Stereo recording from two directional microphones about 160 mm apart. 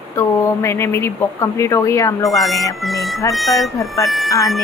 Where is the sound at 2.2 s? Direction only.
Centre (ahead or behind).